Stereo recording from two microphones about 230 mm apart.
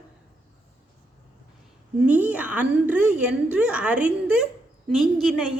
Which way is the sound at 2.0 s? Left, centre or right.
Centre.